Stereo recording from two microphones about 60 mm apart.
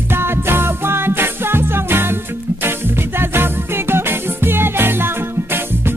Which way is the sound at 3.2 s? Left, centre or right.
Right.